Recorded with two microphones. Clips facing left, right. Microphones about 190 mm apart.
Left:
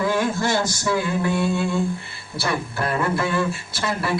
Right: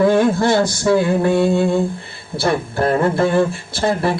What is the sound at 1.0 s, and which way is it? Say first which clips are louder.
Mantra: right 7 dB; 55° right (ahead or behind).